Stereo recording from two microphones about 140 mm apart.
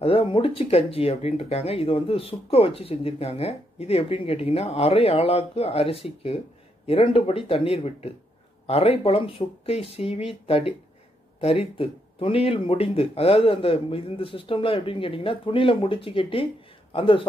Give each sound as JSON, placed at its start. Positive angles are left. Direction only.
{"t": 0.0, "sound": "speech", "side_deg": 40}